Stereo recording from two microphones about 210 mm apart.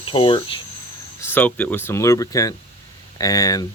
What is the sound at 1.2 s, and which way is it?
Speech, 10° left (ahead or behind).